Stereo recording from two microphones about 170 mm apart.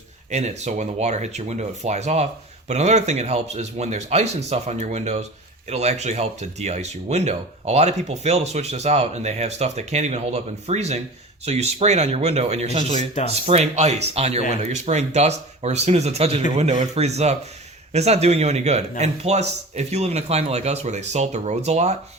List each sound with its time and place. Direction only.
0.3 s speech: 40° right (ahead or behind)